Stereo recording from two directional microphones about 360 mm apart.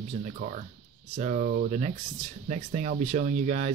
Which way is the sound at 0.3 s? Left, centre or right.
Right.